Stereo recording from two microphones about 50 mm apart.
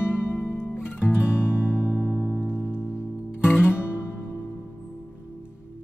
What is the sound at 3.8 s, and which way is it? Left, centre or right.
Music, left.